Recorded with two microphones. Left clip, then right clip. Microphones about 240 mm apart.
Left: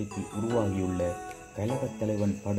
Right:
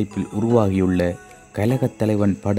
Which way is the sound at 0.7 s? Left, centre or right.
Right.